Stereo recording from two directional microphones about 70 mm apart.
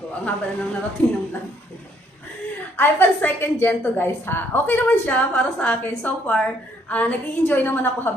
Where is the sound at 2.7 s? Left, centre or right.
Left.